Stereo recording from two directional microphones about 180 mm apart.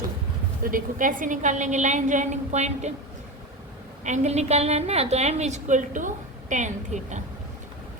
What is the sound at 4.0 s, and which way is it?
A woman's voice, 40° right (ahead or behind).